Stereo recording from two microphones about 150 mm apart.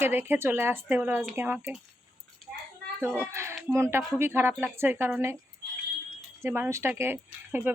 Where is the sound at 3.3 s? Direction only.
20° right (ahead or behind).